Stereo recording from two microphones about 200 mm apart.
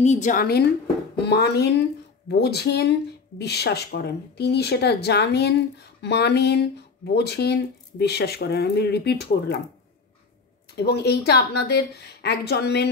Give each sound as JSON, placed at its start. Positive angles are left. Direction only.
{"t": 0.0, "sound": "a woman's voice", "side_deg": 35}
{"t": 10.8, "sound": "a woman's voice", "side_deg": 55}